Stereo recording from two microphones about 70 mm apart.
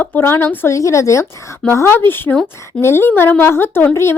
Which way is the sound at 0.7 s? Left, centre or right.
Left.